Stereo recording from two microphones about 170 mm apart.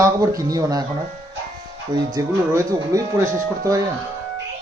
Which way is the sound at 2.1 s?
20° right (ahead or behind).